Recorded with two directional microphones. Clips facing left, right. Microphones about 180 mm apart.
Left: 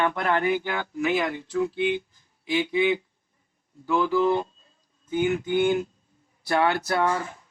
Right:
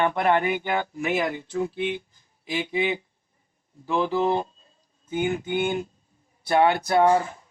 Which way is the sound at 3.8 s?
30° right (ahead or behind).